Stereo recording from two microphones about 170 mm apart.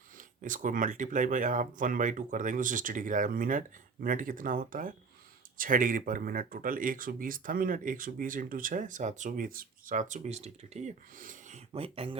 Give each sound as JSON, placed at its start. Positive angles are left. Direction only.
{"t": 0.2, "sound": "speech", "side_deg": -50}